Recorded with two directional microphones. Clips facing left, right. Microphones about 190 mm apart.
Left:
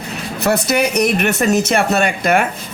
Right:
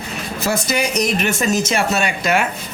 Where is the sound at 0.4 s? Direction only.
60° left (ahead or behind).